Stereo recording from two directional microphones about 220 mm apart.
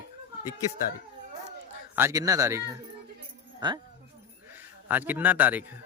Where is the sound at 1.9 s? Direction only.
10° right (ahead or behind).